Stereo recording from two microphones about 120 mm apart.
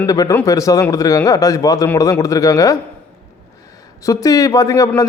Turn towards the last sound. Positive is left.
turn(degrees=25)  # may be behind; listen again after turning